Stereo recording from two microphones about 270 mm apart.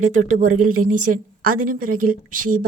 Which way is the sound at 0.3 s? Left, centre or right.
Right.